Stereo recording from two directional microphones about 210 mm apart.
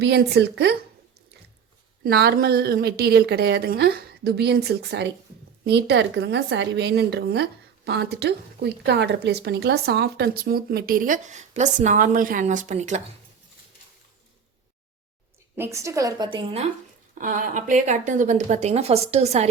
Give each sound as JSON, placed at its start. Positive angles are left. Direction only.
{"t": 0.0, "sound": "a woman's voice", "side_deg": -55}
{"t": 2.0, "sound": "a woman's voice", "side_deg": -50}
{"t": 15.5, "sound": "a woman's voice", "side_deg": -10}
{"t": 17.2, "sound": "speech", "side_deg": -40}